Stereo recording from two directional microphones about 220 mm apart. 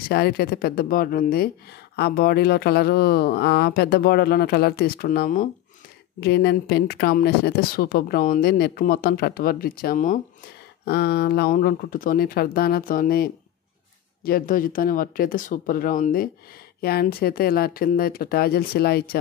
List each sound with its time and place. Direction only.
0.1 s a woman's voice: 45° left (ahead or behind)
10.9 s a woman's voice: 45° left (ahead or behind)